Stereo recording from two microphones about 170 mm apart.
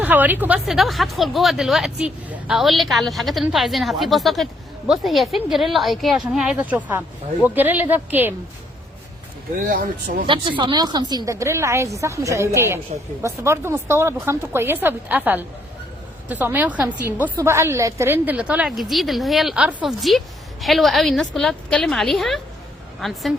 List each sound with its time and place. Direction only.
0.0 s a woman's voice: 10° right (ahead or behind)
9.6 s speech: 55° right (ahead or behind)
10.2 s a woman's voice: 30° right (ahead or behind); by 23.3 s centre (ahead or behind)